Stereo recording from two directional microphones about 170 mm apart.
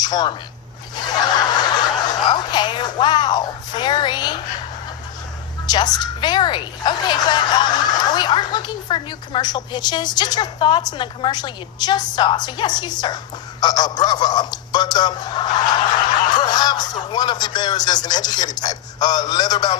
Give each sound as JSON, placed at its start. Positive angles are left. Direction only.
{"t": 0.0, "sound": "speech", "side_deg": 25}
{"t": 1.2, "sound": "snicker", "side_deg": 25}
{"t": 5.7, "sound": "a woman's voice", "side_deg": 25}